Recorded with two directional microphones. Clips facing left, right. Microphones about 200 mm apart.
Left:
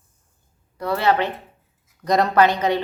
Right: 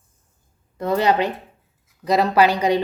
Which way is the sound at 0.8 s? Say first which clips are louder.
Right 2 dB; 15° right (ahead or behind).